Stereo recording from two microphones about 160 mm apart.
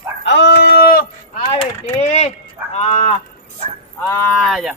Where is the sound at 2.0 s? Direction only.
45° left (ahead or behind).